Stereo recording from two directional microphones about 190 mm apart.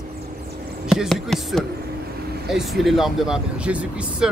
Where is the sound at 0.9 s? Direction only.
Centre (ahead or behind).